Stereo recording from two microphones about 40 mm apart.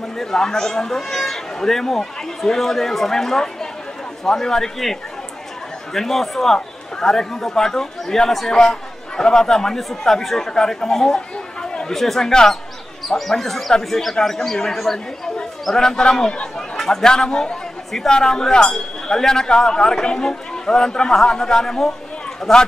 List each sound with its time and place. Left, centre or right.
0.2 s a man's voice: centre
5.9 s a man's voice: centre
11.6 s chatter: centre
11.9 s a man's voice: centre